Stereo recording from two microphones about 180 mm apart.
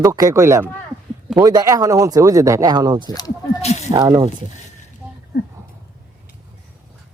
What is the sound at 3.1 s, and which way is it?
Speech, 20° left (ahead or behind).